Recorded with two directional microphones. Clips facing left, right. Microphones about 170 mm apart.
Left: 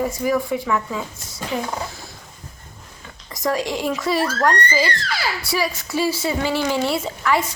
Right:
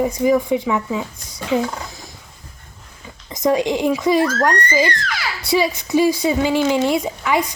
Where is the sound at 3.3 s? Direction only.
20° right (ahead or behind).